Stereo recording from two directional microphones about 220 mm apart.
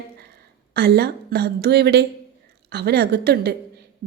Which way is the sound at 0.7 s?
45° right (ahead or behind).